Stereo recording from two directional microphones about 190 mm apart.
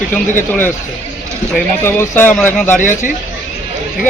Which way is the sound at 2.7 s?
40° left (ahead or behind).